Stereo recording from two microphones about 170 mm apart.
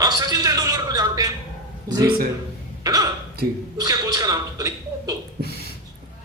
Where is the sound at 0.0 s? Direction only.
20° right (ahead or behind).